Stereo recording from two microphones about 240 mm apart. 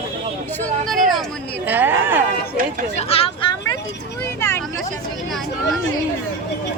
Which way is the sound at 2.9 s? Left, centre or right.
Left.